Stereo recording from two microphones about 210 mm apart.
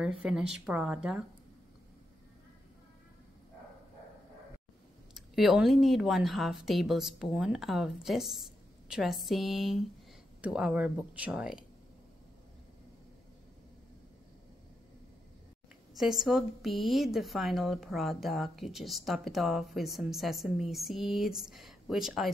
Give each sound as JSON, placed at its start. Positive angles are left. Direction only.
{"t": 0.0, "sound": "a woman's voice", "side_deg": -5}
{"t": 5.1, "sound": "a woman's voice", "side_deg": 0}
{"t": 16.0, "sound": "a woman's voice", "side_deg": 0}